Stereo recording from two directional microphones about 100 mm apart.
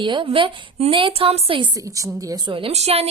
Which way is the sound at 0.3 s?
70° right (ahead or behind).